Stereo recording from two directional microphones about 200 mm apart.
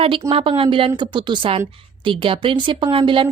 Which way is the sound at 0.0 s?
25° right (ahead or behind).